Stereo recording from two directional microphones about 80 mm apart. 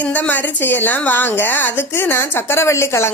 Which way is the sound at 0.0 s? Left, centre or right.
Centre.